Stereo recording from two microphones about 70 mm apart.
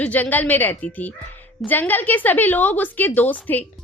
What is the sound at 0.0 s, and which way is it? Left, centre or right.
A woman's voice, left.